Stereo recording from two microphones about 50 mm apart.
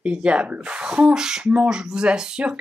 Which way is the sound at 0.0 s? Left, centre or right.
Right.